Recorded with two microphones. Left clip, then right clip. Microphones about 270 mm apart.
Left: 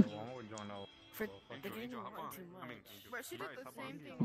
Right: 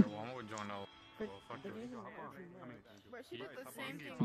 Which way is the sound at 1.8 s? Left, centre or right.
Left.